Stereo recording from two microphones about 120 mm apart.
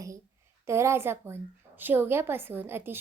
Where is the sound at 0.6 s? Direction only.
25° right (ahead or behind).